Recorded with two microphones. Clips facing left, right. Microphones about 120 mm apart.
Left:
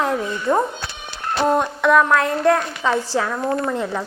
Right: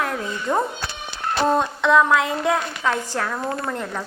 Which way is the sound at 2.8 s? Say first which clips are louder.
Left 5 dB; 20° left (ahead or behind).